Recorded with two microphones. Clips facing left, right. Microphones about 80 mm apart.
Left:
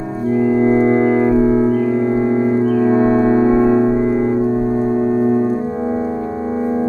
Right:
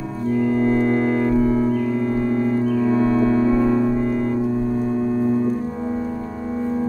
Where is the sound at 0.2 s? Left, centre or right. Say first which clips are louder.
Left 5 dB; left.